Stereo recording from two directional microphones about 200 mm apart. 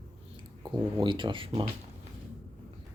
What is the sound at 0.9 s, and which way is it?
Speech, 25° right (ahead or behind).